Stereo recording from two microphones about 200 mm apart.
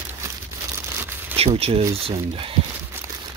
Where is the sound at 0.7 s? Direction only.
10° right (ahead or behind).